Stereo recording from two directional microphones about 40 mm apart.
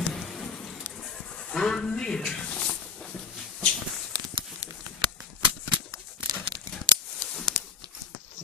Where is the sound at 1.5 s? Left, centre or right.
Centre.